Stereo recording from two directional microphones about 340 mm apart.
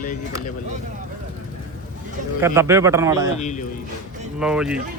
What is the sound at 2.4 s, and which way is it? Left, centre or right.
Speech, centre.